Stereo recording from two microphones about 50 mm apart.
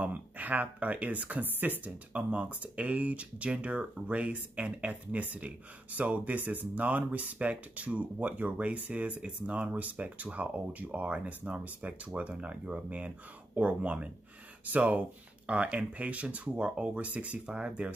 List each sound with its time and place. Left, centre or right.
0.0 s speech: right
2.1 s speech: right